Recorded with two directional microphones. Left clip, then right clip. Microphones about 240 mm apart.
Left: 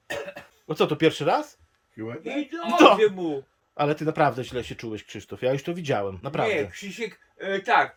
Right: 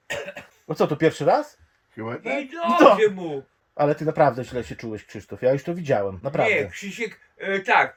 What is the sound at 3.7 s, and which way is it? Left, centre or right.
Speech, centre.